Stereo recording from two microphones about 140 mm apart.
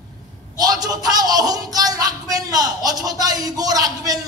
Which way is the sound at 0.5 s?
25° right (ahead or behind).